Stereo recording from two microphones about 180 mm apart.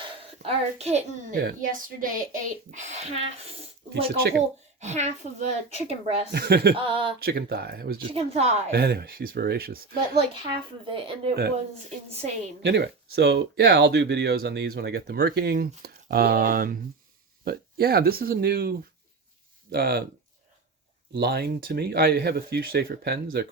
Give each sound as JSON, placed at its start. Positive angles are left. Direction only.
{"t": 0.0, "sound": "a child's voice", "side_deg": -35}
{"t": 1.4, "sound": "speech", "side_deg": -55}
{"t": 4.2, "sound": "speech", "side_deg": -60}
{"t": 4.8, "sound": "speech", "side_deg": -40}
{"t": 6.3, "sound": "speech", "side_deg": -60}
{"t": 6.7, "sound": "speech", "side_deg": -30}
{"t": 7.2, "sound": "speech", "side_deg": -55}
{"t": 8.1, "sound": "speech", "side_deg": -35}
{"t": 8.7, "sound": "speech", "side_deg": -60}
{"t": 10.8, "sound": "speech", "side_deg": -30}
{"t": 12.6, "sound": "speech", "side_deg": -65}
{"t": 21.1, "sound": "speech", "side_deg": -60}